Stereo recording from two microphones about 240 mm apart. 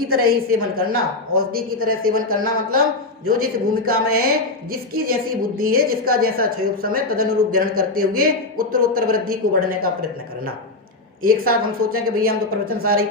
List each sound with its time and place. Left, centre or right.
0.1 s a man's voice: right
11.2 s a man's voice: right